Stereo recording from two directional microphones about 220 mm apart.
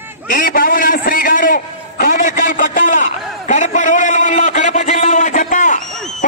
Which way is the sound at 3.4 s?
35° left (ahead or behind).